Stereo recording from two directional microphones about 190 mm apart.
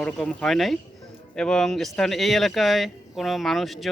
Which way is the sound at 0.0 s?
5° left (ahead or behind).